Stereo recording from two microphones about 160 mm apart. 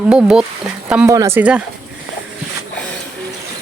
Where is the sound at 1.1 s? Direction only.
20° right (ahead or behind).